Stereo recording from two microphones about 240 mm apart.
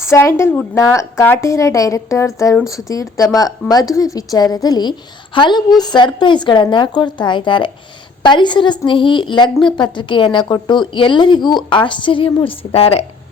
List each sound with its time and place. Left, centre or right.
0.0 s a woman's voice: centre